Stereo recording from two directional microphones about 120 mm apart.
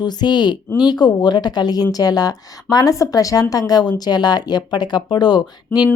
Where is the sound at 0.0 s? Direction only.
35° left (ahead or behind).